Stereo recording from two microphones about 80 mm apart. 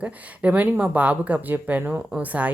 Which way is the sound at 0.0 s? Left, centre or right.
Centre.